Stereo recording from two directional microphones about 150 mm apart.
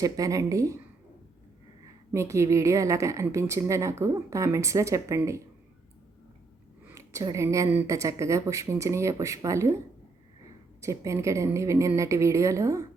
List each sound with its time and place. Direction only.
0.0 s speech: 20° right (ahead or behind)
1.8 s a woman's voice: 20° right (ahead or behind)
6.8 s speech: 20° right (ahead or behind)
10.8 s speech: 20° right (ahead or behind)